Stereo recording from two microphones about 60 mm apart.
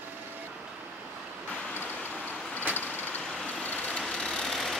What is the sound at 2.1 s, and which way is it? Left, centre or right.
Vehicle, left.